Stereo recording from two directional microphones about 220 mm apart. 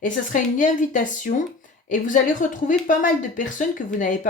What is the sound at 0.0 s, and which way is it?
Speech, 35° left (ahead or behind).